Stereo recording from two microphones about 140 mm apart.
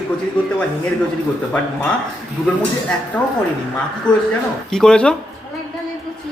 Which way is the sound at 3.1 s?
10° left (ahead or behind).